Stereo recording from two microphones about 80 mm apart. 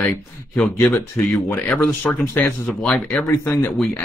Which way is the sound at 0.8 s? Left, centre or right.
Centre.